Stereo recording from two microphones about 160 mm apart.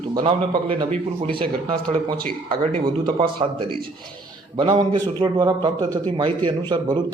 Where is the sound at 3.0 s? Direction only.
30° right (ahead or behind).